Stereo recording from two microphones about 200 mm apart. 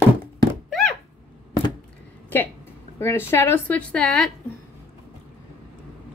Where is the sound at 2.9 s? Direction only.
10° left (ahead or behind).